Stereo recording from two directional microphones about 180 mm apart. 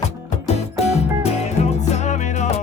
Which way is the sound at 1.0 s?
35° left (ahead or behind).